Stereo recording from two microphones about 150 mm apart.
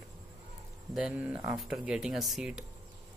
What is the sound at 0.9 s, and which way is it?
Speech, 5° right (ahead or behind).